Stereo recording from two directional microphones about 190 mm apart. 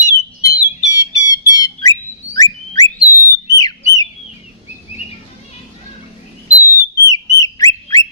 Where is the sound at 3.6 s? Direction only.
20° left (ahead or behind).